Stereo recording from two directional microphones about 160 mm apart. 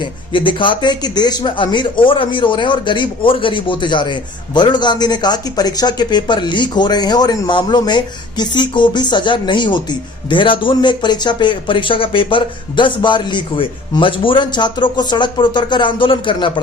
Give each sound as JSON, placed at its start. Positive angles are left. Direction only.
{"t": 0.0, "sound": "speech", "side_deg": 30}